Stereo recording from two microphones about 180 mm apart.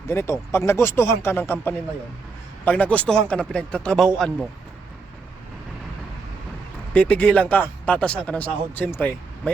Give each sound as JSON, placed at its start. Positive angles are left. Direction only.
{"t": 0.1, "sound": "a man's voice", "side_deg": 15}
{"t": 6.9, "sound": "speech", "side_deg": 5}